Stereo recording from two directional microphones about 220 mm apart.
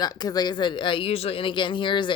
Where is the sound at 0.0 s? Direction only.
20° left (ahead or behind).